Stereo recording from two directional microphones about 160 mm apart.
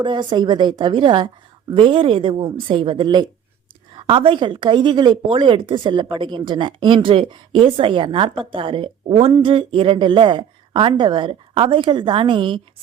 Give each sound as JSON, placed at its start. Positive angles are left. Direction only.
{"t": 0.0, "sound": "a woman's voice", "side_deg": -30}